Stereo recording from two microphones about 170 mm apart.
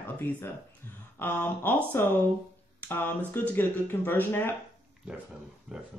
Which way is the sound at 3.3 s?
15° left (ahead or behind).